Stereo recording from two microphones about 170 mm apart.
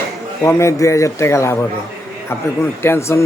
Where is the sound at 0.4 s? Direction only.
20° left (ahead or behind).